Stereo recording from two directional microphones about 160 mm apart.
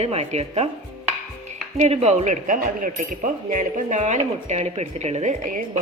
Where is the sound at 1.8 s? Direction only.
40° right (ahead or behind).